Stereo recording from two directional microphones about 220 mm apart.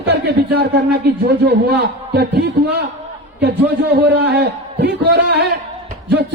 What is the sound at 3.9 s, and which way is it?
Speech, 45° right (ahead or behind).